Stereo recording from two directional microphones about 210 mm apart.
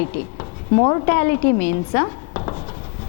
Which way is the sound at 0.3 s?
20° left (ahead or behind).